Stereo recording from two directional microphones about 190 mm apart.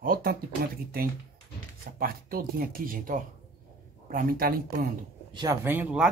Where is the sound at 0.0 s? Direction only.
50° right (ahead or behind).